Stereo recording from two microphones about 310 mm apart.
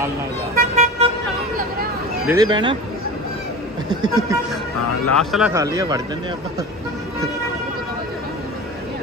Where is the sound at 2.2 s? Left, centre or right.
Centre.